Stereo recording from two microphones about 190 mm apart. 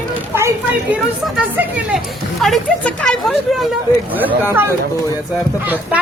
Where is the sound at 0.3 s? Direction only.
10° right (ahead or behind).